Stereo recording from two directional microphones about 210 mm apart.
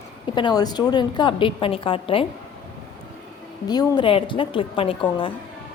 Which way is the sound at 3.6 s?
20° left (ahead or behind).